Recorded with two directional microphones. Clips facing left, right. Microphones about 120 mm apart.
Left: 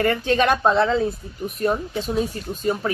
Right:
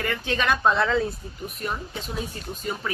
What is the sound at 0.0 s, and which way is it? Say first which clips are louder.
Speech: left 7 dB; 40° left (ahead or behind).